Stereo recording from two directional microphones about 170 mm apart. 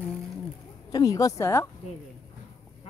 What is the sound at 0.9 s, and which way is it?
Speech, 20° left (ahead or behind).